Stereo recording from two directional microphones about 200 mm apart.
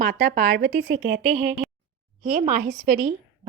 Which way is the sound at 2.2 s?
35° right (ahead or behind).